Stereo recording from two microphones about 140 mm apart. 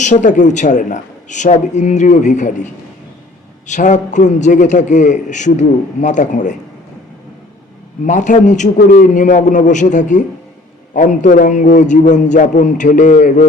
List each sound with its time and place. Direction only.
0.0 s a man's voice: 60° left (ahead or behind)
3.7 s a man's voice: 60° left (ahead or behind)
8.0 s a man's voice: 60° left (ahead or behind)